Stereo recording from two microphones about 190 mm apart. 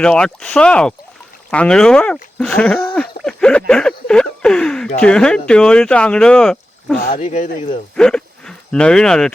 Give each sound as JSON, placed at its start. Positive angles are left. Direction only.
{"t": 0.0, "sound": "speech", "side_deg": 5}
{"t": 7.1, "sound": "speech", "side_deg": 40}
{"t": 7.9, "sound": "speech", "side_deg": 5}